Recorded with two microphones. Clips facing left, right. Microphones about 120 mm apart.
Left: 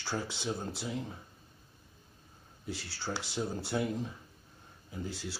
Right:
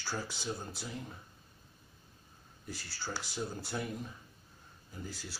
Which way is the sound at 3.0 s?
25° left (ahead or behind).